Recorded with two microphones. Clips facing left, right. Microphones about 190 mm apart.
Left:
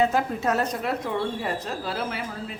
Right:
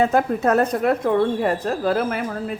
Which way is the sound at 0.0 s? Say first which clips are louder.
Right 5 dB; 50° right (ahead or behind).